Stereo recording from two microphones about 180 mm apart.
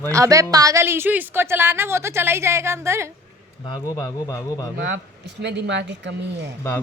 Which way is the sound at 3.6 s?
20° left (ahead or behind).